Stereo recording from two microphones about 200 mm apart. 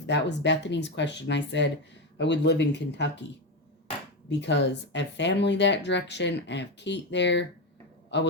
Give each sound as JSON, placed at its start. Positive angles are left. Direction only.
{"t": 0.0, "sound": "speech", "side_deg": 60}
{"t": 4.3, "sound": "speech", "side_deg": 60}